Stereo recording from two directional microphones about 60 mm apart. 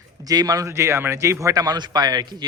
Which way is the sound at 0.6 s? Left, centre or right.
Right.